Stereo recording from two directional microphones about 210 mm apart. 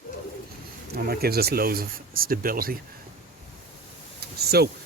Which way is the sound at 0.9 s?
45° right (ahead or behind).